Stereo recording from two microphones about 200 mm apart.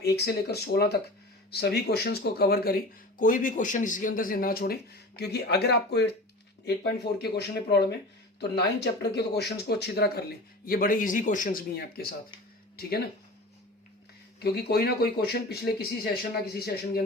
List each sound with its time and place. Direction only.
0.0 s speech: 55° left (ahead or behind)
14.3 s speech: 50° left (ahead or behind)